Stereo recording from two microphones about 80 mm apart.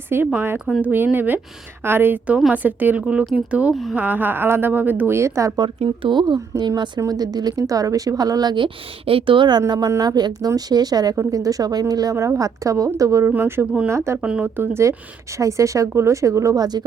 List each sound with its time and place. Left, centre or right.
0.3 s a woman's voice: right
5.5 s speech: right
6.6 s a woman's voice: right
9.2 s a woman's voice: right
12.1 s a woman's voice: right
13.2 s a woman's voice: right
14.2 s speech: centre
14.4 s a woman's voice: right